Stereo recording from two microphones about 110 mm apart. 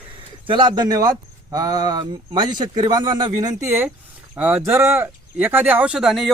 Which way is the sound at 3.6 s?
25° right (ahead or behind).